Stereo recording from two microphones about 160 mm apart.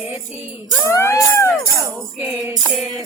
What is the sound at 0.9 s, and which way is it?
Music, 15° left (ahead or behind).